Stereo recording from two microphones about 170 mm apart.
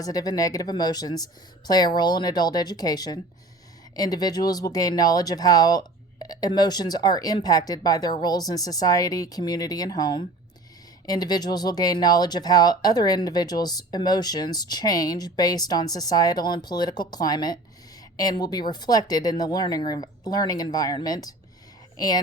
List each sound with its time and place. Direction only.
0.0 s speech: 20° left (ahead or behind)